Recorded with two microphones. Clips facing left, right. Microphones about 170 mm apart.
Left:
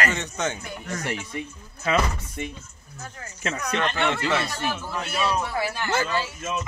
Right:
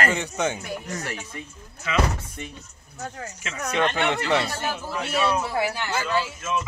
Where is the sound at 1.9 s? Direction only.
40° left (ahead or behind).